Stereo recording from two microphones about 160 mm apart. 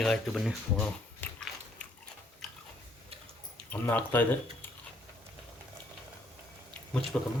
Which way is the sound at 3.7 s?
10° left (ahead or behind).